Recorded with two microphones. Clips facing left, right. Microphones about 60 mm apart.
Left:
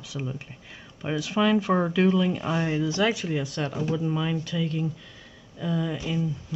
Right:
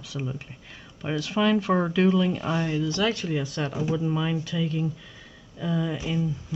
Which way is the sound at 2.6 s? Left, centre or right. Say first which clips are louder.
Left 2 dB; centre.